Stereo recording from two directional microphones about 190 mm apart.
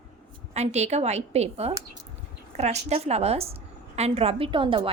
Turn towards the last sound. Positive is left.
turn(degrees=-25)  # may be behind; listen again after turning